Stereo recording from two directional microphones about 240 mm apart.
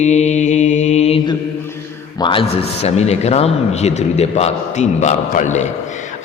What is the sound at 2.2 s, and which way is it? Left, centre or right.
A man's voice, left.